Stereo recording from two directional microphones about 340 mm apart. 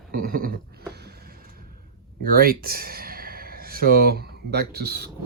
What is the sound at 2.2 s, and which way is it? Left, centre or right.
Speech, right.